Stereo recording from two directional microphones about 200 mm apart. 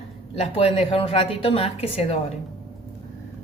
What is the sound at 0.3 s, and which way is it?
A woman's voice, 30° left (ahead or behind).